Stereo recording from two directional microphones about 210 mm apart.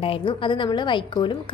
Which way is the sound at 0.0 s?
25° left (ahead or behind).